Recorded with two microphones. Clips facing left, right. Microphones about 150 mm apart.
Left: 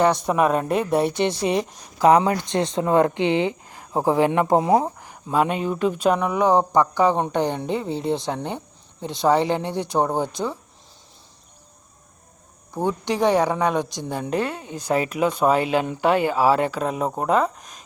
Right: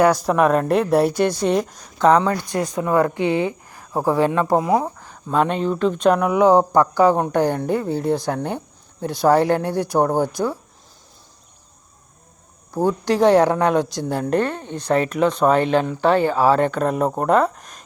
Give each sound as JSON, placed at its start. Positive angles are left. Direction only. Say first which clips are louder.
{"t": 0.0, "sound": "speech", "louder": "right 3 dB", "side_deg": 0}
{"t": 6.1, "sound": "speech", "louder": "right 5 dB", "side_deg": -5}
{"t": 12.7, "sound": "speech", "louder": "right 4 dB", "side_deg": -5}
{"t": 13.1, "sound": "speech", "louder": "right 5 dB", "side_deg": 15}
{"t": 13.4, "sound": "speech", "louder": "right 4 dB", "side_deg": -10}
{"t": 14.2, "sound": "speech", "louder": "right 4 dB", "side_deg": 5}